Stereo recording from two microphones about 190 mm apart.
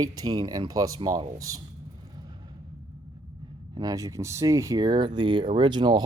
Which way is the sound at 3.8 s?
20° right (ahead or behind).